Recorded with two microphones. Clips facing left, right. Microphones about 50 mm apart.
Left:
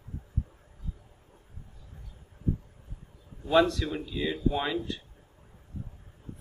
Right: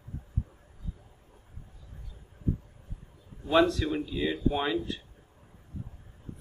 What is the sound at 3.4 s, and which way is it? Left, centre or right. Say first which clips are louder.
A man's voice: even; centre.